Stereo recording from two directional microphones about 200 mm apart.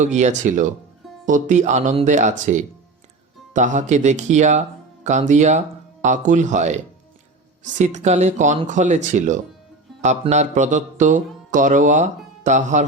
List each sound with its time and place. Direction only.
0.0 s speech: 35° right (ahead or behind)